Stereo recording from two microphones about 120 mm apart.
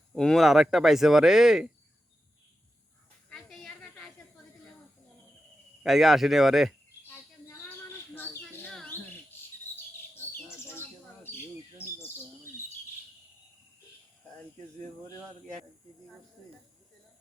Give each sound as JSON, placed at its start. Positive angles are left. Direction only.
{"t": 0.1, "sound": "speech", "side_deg": 5}
{"t": 3.2, "sound": "a sound", "side_deg": 5}
{"t": 5.8, "sound": "speech", "side_deg": 0}
{"t": 8.1, "sound": "bird", "side_deg": 15}
{"t": 10.2, "sound": "bird", "side_deg": 20}